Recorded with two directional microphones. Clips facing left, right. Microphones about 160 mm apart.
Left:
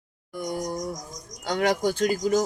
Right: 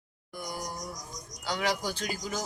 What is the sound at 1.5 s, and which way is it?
Speech, 50° left (ahead or behind).